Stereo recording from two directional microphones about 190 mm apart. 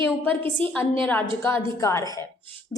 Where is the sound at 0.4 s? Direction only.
10° left (ahead or behind).